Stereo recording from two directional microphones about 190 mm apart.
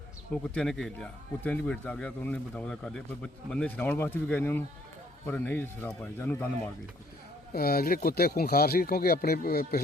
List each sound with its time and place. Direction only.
0.5 s a man's voice: 5° left (ahead or behind)
7.5 s speech: 50° left (ahead or behind)